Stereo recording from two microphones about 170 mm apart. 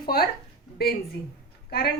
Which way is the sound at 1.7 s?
65° left (ahead or behind).